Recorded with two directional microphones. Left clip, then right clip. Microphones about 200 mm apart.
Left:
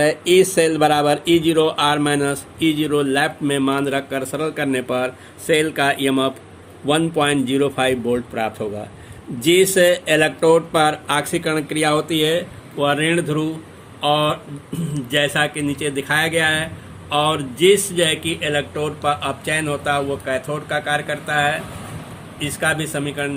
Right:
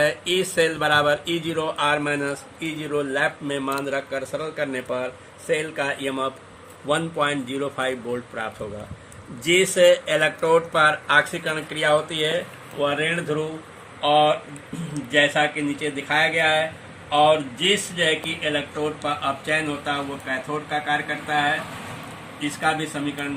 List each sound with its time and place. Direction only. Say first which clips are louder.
0.0 s a man's voice: left 7 dB; 30° left (ahead or behind)
9.5 s a man's voice: left 2 dB; 50° left (ahead or behind)
22.4 s speech: left 3 dB; 55° left (ahead or behind)